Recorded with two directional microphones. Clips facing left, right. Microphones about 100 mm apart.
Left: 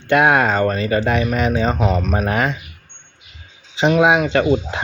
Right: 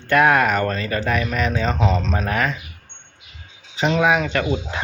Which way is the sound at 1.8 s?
10° left (ahead or behind).